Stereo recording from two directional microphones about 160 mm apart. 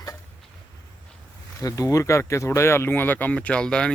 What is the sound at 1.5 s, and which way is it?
Speech, 20° left (ahead or behind).